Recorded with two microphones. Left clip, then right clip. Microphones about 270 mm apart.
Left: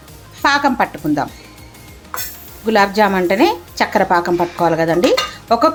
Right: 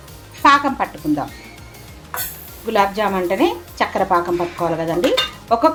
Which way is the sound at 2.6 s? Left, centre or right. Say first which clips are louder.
Left 4 dB; centre.